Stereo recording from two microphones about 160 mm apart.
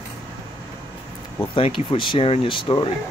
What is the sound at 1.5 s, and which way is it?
Speech, 35° left (ahead or behind).